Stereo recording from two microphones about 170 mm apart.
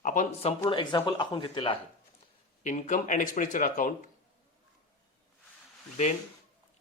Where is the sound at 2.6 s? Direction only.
50° left (ahead or behind).